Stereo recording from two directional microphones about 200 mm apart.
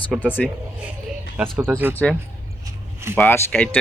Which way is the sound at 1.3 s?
10° right (ahead or behind).